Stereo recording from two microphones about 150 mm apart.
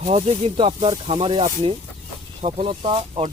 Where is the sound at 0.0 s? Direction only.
45° right (ahead or behind).